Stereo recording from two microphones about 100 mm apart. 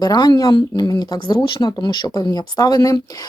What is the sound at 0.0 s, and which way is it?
Speech, 45° left (ahead or behind).